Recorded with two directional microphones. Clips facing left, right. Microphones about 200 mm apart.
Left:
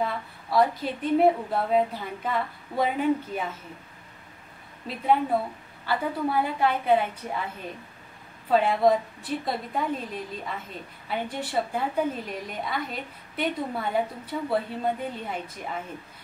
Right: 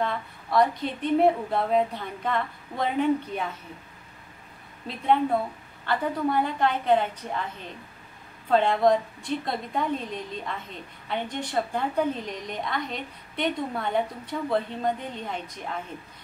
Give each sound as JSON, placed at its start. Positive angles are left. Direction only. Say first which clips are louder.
{"t": 0.0, "sound": "a woman's voice", "louder": "even", "side_deg": 5}
{"t": 4.8, "sound": "a woman's voice", "louder": "right 1 dB", "side_deg": 5}
{"t": 8.5, "sound": "a woman's voice", "louder": "even", "side_deg": 5}